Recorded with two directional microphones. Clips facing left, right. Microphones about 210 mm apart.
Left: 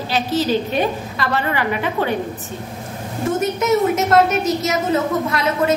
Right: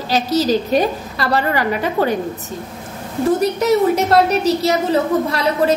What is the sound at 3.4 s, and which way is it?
A woman's voice, 35° right (ahead or behind).